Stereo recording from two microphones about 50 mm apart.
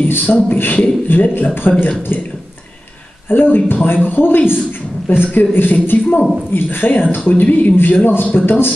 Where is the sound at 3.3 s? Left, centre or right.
Left.